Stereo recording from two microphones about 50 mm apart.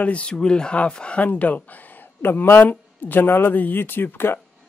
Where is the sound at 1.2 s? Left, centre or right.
Left.